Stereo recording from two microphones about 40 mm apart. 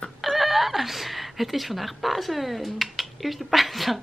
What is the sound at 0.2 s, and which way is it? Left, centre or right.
Speech, centre.